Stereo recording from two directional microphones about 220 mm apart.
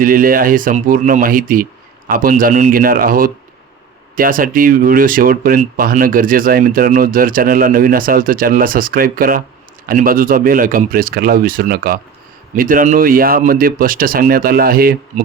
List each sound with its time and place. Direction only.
0.0 s speech: 40° right (ahead or behind)